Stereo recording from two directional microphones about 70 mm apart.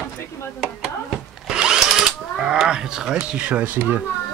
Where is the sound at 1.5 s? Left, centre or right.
Centre.